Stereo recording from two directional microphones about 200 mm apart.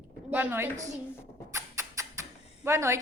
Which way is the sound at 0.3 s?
10° right (ahead or behind).